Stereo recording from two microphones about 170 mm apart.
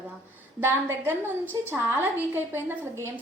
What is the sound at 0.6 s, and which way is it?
A woman's voice, 15° right (ahead or behind).